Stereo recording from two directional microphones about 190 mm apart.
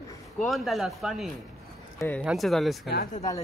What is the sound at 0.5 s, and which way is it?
Speech, centre (ahead or behind).